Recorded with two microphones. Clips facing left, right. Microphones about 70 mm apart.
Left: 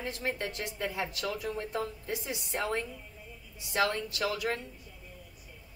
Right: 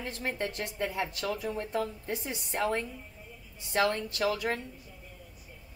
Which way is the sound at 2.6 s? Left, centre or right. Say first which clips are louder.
Right 3 dB; centre.